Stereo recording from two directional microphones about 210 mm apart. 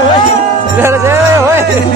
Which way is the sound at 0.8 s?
10° right (ahead or behind).